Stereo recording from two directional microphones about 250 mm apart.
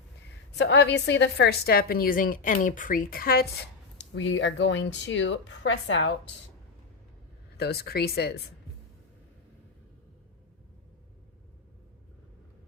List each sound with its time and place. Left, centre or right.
0.5 s a woman's voice: left
7.5 s a woman's voice: left